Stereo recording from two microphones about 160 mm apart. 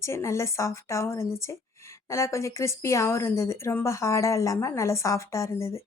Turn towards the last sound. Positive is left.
turn(degrees=15)  # may be behind; listen again after turning